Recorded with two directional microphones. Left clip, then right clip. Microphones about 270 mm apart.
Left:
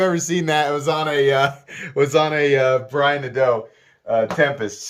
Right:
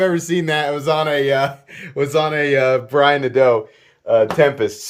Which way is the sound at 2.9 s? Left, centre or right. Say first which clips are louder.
Right 5 dB; centre.